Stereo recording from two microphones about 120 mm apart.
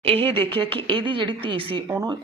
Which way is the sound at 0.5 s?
45° right (ahead or behind).